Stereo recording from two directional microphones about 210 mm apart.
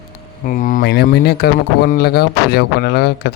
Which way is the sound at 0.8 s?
55° left (ahead or behind).